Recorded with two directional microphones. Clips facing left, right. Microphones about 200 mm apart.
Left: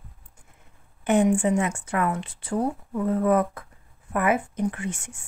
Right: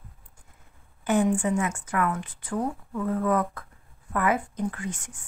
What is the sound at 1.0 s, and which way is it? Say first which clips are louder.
A woman's voice: left 3 dB; 25° left (ahead or behind).